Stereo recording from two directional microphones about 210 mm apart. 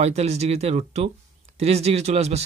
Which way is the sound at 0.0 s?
30° right (ahead or behind).